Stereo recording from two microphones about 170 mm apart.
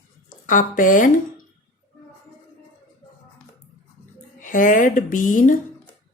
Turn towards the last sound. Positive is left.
turn(degrees=50)  # may be behind; listen again after turning